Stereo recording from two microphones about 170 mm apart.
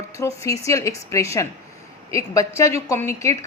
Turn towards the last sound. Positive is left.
turn(degrees=15)  # may be behind; listen again after turning